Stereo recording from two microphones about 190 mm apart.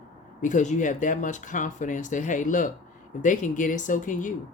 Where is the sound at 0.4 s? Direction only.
40° left (ahead or behind).